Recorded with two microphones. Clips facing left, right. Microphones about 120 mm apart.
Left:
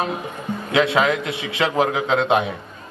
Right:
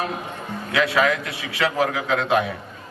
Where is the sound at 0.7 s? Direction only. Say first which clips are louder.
Left 2 dB; 25° left (ahead or behind).